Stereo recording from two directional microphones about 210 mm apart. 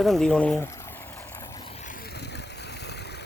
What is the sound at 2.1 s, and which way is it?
Vehicle, 50° left (ahead or behind).